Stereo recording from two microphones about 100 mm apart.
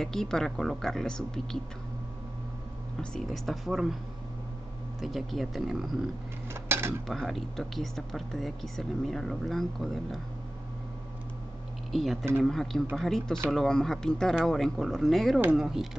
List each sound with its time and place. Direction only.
0.0 s speech: 5° left (ahead or behind)
3.0 s speech: 5° left (ahead or behind)
5.0 s speech: centre (ahead or behind)
6.5 s dishes: 25° right (ahead or behind)
7.1 s speech: centre (ahead or behind)
11.9 s speech: centre (ahead or behind)